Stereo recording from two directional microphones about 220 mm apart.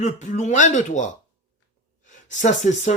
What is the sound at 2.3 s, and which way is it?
Speech, 35° left (ahead or behind).